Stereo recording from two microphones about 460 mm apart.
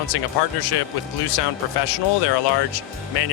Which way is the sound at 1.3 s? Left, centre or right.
Left.